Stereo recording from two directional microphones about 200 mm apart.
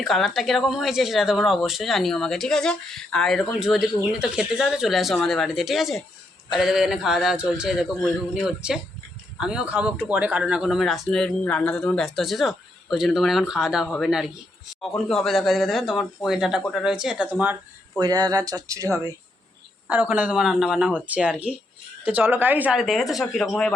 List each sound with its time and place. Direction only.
0.0 s speech: centre (ahead or behind)
18.0 s speech: 20° right (ahead or behind); by 23.7 s 5° left (ahead or behind)